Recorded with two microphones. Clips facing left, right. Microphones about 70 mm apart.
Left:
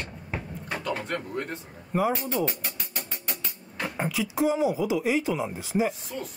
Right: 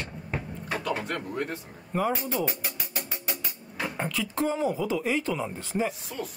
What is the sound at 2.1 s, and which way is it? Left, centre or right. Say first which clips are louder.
Speech: left 1 dB; centre.